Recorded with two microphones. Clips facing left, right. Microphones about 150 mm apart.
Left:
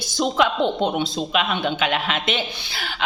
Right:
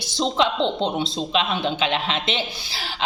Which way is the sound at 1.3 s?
30° right (ahead or behind).